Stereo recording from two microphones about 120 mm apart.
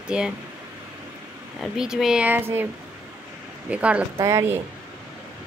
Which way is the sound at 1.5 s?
5° right (ahead or behind).